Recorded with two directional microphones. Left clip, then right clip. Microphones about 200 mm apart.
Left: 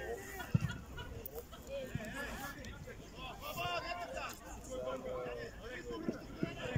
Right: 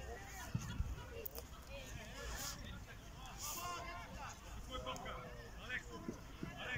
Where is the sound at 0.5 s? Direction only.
45° left (ahead or behind).